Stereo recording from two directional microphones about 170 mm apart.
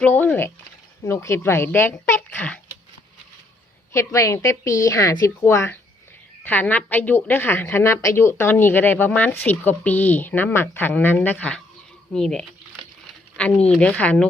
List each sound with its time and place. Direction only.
0.0 s a woman's voice: 10° left (ahead or behind)
3.9 s a woman's voice: 20° left (ahead or behind)